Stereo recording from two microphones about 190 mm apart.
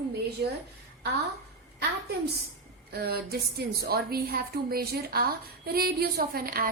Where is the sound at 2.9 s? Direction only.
55° right (ahead or behind).